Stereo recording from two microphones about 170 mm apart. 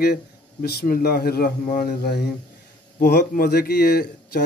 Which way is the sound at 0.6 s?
65° left (ahead or behind).